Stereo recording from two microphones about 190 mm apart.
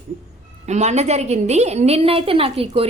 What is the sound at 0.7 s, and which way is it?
A woman's voice, 35° right (ahead or behind).